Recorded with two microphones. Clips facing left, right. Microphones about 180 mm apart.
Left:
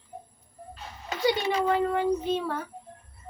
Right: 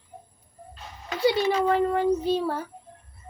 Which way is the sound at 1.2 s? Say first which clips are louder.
Right 3 dB; 35° right (ahead or behind).